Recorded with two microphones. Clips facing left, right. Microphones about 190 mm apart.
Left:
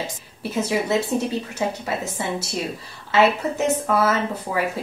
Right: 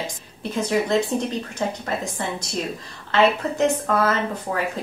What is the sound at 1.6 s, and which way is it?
Speech, 10° left (ahead or behind).